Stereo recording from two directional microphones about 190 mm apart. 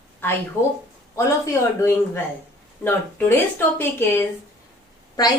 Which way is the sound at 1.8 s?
10° left (ahead or behind).